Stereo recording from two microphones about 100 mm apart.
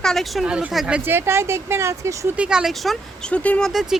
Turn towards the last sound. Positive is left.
turn(degrees=-5)  # may be behind; listen again after turning